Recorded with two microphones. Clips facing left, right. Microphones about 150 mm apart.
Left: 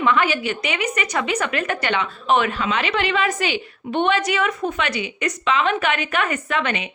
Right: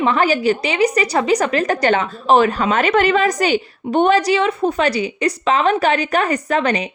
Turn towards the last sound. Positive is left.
turn(degrees=-40)  # may be behind; listen again after turning